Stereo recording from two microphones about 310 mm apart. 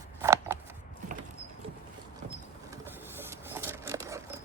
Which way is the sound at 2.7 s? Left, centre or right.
Centre.